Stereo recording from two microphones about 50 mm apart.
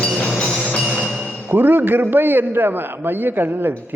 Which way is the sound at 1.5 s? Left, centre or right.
Right.